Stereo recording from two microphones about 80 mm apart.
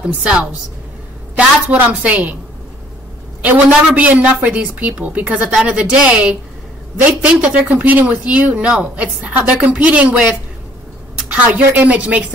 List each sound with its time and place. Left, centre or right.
0.0 s a man's voice: centre
3.4 s a man's voice: centre
11.3 s a man's voice: centre